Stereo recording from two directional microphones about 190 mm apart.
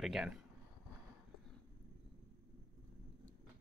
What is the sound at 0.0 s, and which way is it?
Speech, 5° right (ahead or behind).